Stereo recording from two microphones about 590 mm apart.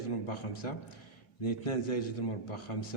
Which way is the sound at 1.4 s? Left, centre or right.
Left.